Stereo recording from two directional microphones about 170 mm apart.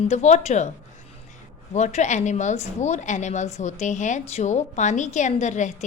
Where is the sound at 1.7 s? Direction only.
40° left (ahead or behind).